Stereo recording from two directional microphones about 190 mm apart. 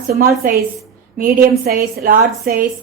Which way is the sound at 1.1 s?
50° right (ahead or behind).